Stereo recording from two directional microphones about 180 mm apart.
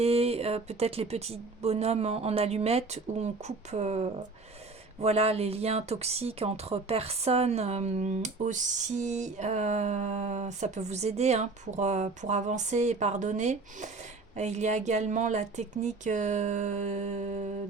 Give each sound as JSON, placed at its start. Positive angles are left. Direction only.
{"t": 0.0, "sound": "speech", "side_deg": -35}